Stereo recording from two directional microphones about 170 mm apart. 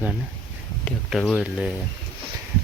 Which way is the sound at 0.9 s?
Centre (ahead or behind).